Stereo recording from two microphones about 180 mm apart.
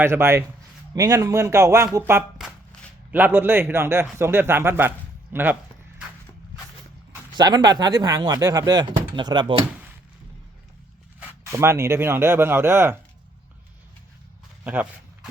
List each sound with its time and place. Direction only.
0.0 s a man's voice: 15° right (ahead or behind)
7.3 s speech: 25° right (ahead or behind)
11.2 s a man's voice: 15° right (ahead or behind)
14.6 s a sound: 10° right (ahead or behind)